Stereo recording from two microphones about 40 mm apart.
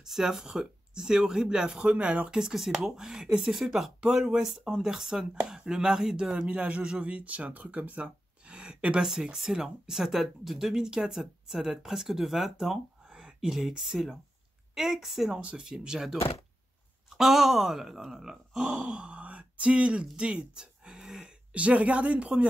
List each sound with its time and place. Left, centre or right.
0.0 s speech: centre
1.9 s speech: right
2.5 s speech: centre
4.0 s speech: centre
9.0 s speech: centre
15.4 s speech: right
17.1 s speech: centre
18.9 s speech: right
20.2 s a sound: right
21.2 s speech: right